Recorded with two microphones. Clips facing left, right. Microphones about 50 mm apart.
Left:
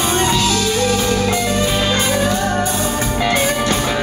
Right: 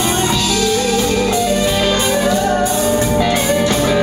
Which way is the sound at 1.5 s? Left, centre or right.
Centre.